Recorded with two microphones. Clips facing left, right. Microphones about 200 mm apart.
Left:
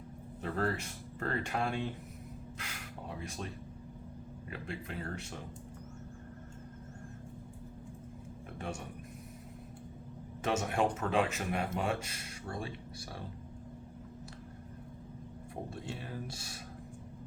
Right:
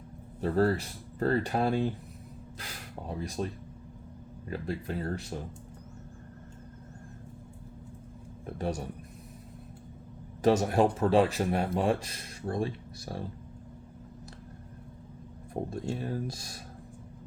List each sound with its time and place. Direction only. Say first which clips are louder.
0.4 s speech: right 8 dB; 35° right (ahead or behind)
8.4 s a sound: right 8 dB; 35° right (ahead or behind)
10.4 s speech: right 8 dB; 40° right (ahead or behind)
15.7 s speech: right 8 dB; 40° right (ahead or behind)